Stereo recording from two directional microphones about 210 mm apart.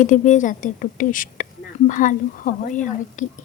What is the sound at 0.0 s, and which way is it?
A woman's voice, 35° left (ahead or behind).